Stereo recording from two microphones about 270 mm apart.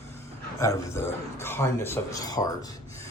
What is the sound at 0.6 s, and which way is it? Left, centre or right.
A man's voice, centre.